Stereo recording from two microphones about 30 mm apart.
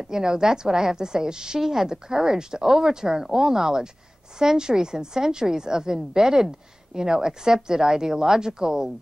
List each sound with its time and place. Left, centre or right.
0.0 s a woman's voice: right